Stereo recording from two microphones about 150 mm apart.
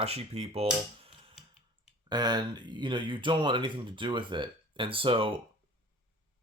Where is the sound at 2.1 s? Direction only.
30° right (ahead or behind).